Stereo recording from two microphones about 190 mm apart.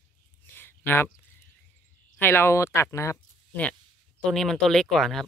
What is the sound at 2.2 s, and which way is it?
Speech, 10° left (ahead or behind).